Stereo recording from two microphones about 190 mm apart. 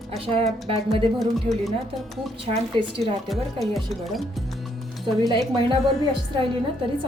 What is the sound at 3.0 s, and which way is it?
Speech, centre (ahead or behind).